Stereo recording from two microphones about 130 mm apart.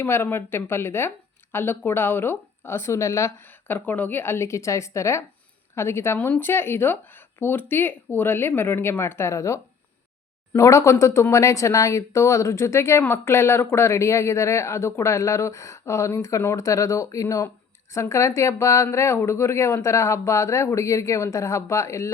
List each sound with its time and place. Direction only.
0.0 s speech: 15° left (ahead or behind)